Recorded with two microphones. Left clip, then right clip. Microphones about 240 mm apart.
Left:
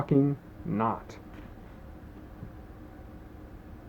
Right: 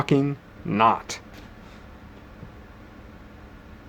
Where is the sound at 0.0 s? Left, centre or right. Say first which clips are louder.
Right 4 dB; right.